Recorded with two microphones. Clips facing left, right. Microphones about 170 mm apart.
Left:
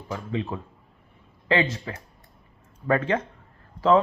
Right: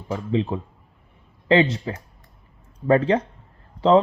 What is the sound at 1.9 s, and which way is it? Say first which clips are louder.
Speech: right 6 dB; 25° right (ahead or behind).